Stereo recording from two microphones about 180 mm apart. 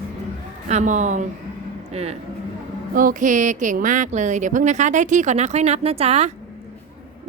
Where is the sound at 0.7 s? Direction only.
40° right (ahead or behind).